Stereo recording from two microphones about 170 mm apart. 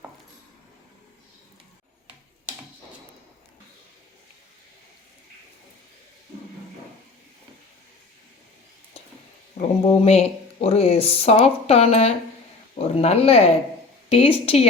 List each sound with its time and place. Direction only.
9.6 s speech: 35° left (ahead or behind)